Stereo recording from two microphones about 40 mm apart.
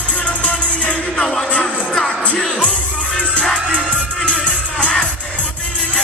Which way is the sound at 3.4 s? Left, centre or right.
Centre.